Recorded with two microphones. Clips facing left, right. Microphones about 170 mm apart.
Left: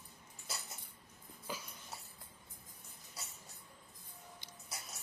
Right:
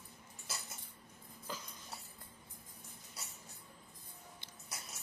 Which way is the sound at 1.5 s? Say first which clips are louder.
Left 1 dB; 10° left (ahead or behind).